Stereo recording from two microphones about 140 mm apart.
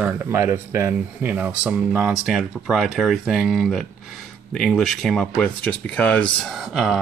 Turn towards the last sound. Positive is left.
turn(degrees=0)  # may be behind; listen again after turning